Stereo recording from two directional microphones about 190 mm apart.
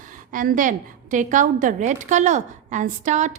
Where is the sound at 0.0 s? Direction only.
45° right (ahead or behind).